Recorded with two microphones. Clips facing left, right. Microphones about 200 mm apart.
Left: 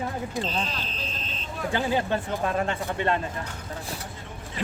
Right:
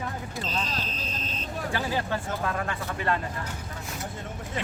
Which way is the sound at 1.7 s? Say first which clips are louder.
Left 5 dB; 20° left (ahead or behind).